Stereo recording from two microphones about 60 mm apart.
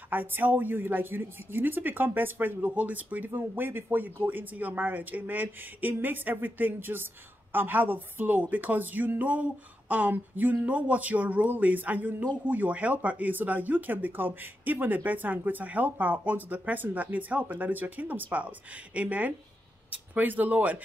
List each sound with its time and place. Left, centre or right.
0.1 s speech: right